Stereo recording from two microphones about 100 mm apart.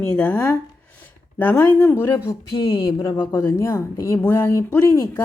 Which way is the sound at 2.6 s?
60° left (ahead or behind).